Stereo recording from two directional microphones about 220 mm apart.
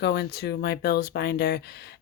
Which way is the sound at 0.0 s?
50° left (ahead or behind).